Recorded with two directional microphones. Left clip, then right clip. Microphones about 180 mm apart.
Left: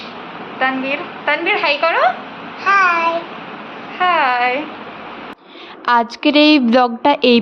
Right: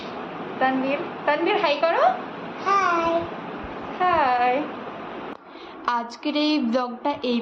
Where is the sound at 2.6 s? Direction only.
10° right (ahead or behind).